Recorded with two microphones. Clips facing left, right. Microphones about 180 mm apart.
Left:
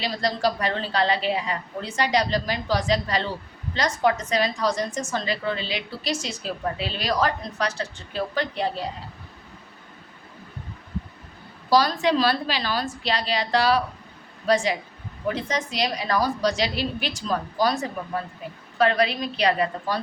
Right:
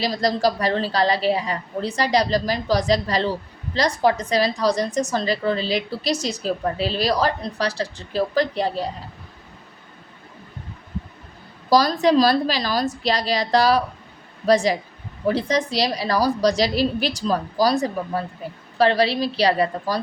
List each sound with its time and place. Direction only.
0.0 s a woman's voice: 40° right (ahead or behind)
11.7 s a woman's voice: 40° right (ahead or behind)